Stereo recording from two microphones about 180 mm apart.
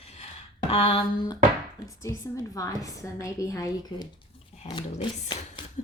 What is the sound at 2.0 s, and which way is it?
A woman's voice, 15° left (ahead or behind).